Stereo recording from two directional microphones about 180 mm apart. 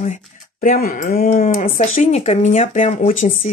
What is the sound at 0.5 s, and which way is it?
Speech, 55° left (ahead or behind).